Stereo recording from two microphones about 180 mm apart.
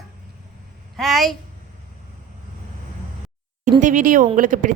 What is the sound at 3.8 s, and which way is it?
Speech, 45° right (ahead or behind).